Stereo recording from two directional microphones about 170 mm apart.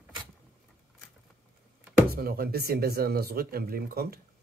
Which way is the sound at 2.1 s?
65° right (ahead or behind).